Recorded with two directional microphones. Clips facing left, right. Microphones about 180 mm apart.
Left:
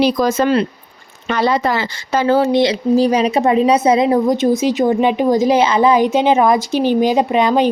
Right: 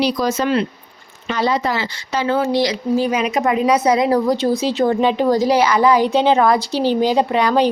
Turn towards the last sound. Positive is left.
turn(degrees=20)  # may be behind; listen again after turning